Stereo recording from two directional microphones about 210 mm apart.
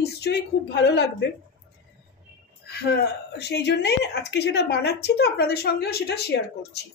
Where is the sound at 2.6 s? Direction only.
50° left (ahead or behind).